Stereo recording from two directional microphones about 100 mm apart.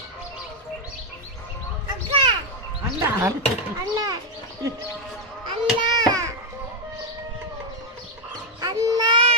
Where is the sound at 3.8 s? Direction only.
40° right (ahead or behind).